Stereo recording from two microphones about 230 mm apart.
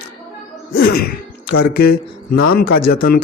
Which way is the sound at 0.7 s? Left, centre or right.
Left.